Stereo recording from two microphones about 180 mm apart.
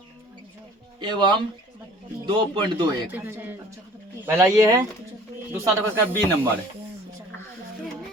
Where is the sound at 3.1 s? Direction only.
10° right (ahead or behind).